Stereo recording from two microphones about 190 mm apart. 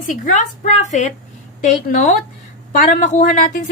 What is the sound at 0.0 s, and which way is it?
A woman's voice, 45° left (ahead or behind).